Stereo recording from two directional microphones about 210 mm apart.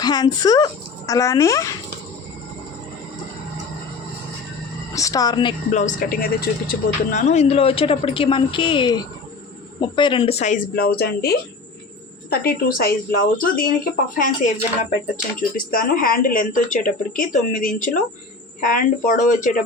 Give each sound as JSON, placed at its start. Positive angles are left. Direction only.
{"t": 0.0, "sound": "speech", "side_deg": 20}
{"t": 4.9, "sound": "speech", "side_deg": 15}
{"t": 5.7, "sound": "a woman's voice", "side_deg": 35}